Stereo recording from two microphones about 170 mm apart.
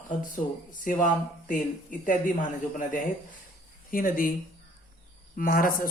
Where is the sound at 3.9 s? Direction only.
55° left (ahead or behind).